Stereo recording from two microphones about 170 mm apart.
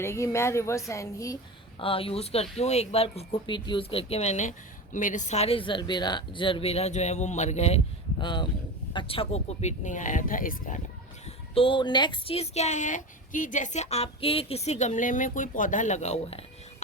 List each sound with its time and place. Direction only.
0.0 s a woman's voice: 15° left (ahead or behind)
1.8 s speech: 30° left (ahead or behind)
8.2 s speech: 25° left (ahead or behind); by 10.8 s 55° left (ahead or behind)
11.5 s speech: 30° left (ahead or behind)